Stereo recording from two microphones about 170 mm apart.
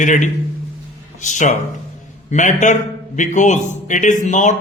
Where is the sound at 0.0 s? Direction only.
45° left (ahead or behind).